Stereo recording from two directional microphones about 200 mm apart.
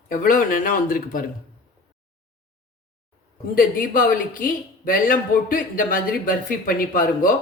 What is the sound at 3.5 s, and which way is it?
Speech, 45° left (ahead or behind).